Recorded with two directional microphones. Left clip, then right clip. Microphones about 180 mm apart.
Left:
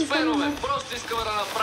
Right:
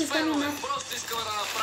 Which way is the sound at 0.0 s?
25° left (ahead or behind).